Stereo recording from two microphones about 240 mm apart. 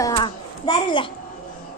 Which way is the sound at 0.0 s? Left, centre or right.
Centre.